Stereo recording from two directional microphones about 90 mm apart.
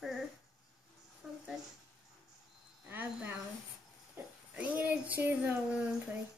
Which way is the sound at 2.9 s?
20° right (ahead or behind).